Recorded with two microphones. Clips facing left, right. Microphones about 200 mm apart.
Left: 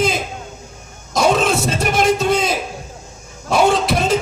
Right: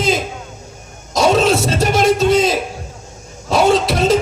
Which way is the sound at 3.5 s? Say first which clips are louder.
Right 2 dB; 55° left (ahead or behind).